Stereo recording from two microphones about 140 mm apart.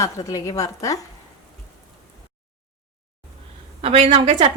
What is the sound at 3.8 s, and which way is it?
Speech, 45° right (ahead or behind).